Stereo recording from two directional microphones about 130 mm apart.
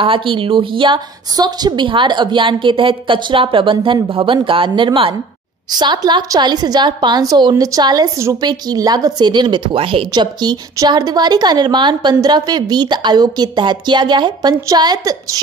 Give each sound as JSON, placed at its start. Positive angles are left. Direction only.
{"t": 0.0, "sound": "a woman's voice", "side_deg": -40}